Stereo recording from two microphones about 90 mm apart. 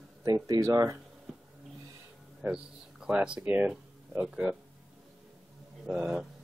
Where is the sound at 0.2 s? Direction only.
40° right (ahead or behind).